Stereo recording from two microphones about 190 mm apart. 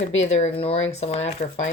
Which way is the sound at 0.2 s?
35° left (ahead or behind).